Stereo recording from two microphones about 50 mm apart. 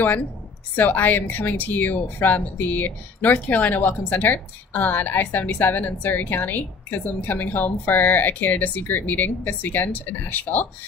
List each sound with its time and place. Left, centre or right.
0.0 s speech: left